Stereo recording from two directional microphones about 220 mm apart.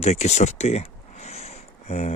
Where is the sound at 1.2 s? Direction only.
30° left (ahead or behind).